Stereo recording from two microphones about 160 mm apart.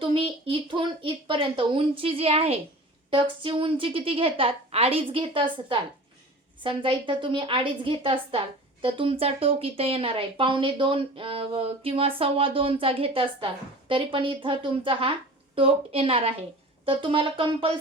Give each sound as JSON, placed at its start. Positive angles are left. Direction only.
{"t": 0.7, "sound": "speech", "side_deg": -30}